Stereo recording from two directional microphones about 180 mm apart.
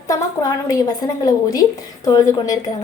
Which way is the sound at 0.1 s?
20° left (ahead or behind).